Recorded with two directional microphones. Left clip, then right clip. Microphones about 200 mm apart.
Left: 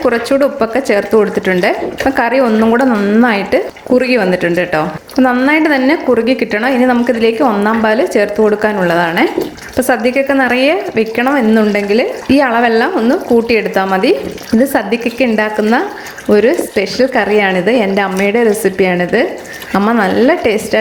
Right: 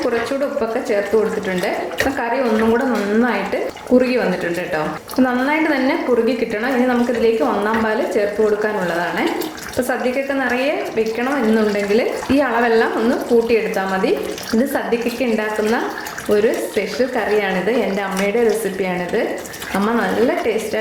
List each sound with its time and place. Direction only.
0.1 s a woman's voice: 45° left (ahead or behind)